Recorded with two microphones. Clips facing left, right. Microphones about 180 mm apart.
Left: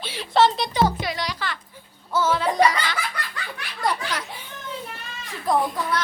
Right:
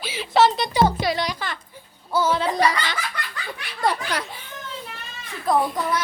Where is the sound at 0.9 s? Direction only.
30° right (ahead or behind).